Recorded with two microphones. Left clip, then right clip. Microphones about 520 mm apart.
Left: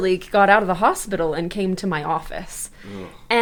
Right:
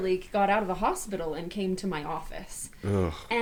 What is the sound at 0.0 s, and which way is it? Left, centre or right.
A woman's voice, left.